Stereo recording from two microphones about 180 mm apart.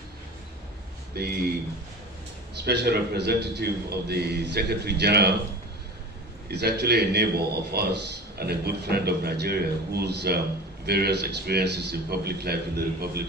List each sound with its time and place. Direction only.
1.1 s speech: 60° right (ahead or behind)
2.5 s a man's voice: 65° right (ahead or behind)
6.5 s a man's voice: 65° right (ahead or behind)